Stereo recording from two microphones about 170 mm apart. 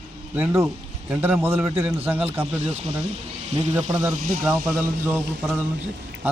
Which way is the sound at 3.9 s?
10° right (ahead or behind).